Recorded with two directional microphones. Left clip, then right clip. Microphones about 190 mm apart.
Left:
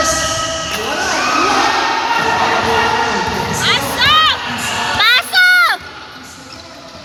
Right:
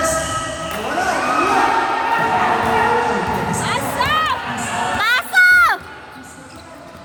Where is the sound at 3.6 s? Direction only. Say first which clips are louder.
Left 6 dB; 35° right (ahead or behind).